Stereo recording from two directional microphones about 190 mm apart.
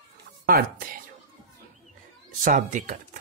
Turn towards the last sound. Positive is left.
turn(degrees=-45)  # may be behind; listen again after turning